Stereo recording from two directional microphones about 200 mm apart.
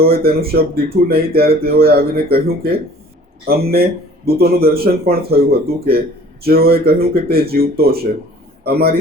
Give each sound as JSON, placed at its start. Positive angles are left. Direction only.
{"t": 0.0, "sound": "speech", "side_deg": -50}